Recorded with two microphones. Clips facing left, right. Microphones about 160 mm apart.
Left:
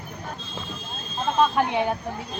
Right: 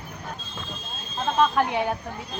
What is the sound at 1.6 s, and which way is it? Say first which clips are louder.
Speech: left 1 dB; 20° left (ahead or behind).